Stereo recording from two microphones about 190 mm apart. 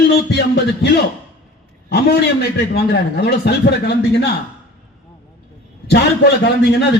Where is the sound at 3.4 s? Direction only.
60° left (ahead or behind).